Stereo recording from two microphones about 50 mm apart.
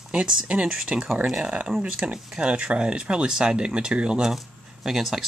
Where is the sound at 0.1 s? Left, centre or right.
Centre.